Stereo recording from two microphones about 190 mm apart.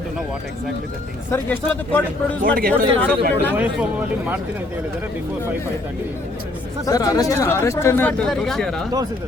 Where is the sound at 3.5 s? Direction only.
10° right (ahead or behind).